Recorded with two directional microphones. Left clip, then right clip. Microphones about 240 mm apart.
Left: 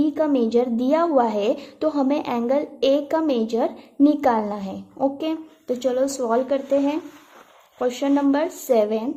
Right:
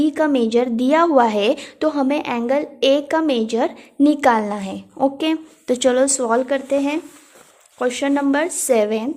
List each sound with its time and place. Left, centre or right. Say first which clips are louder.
0.0 s a woman's voice: right 3 dB; centre